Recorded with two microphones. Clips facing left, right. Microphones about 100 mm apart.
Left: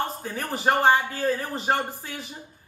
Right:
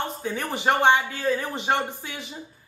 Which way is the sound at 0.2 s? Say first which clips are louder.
Right 1 dB; 40° left (ahead or behind).